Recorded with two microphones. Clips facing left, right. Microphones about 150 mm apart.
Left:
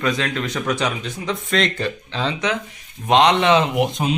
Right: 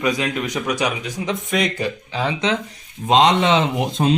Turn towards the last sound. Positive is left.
turn(degrees=-25)  # may be behind; listen again after turning